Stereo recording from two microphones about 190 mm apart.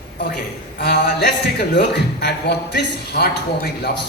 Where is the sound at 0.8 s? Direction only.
60° left (ahead or behind).